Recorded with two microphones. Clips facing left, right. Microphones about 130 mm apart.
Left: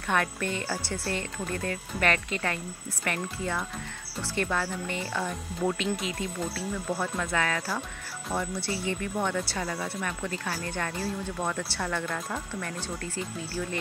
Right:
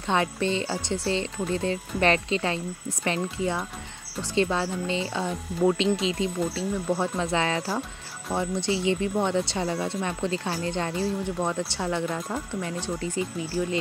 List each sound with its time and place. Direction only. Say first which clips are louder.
0.1 s speech: right 4 dB; 20° right (ahead or behind)